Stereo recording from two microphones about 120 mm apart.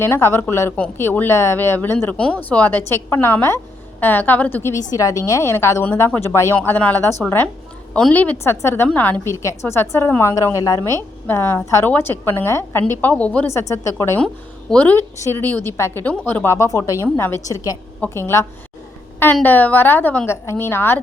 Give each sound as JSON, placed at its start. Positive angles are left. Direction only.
{"t": 0.0, "sound": "a woman's voice", "side_deg": 20}
{"t": 6.6, "sound": "a woman's voice", "side_deg": 10}
{"t": 13.5, "sound": "a woman's voice", "side_deg": 25}
{"t": 14.7, "sound": "a woman's voice", "side_deg": 15}